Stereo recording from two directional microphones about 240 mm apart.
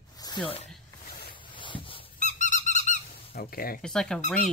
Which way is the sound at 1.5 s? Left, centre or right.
Left.